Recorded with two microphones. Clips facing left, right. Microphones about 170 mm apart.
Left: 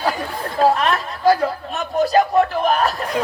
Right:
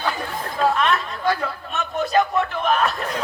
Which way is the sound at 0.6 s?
35° left (ahead or behind).